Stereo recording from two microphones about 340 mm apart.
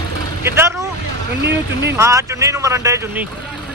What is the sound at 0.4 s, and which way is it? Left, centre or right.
Speech, centre.